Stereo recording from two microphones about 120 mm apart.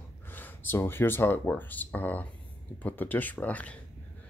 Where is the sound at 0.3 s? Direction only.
15° left (ahead or behind).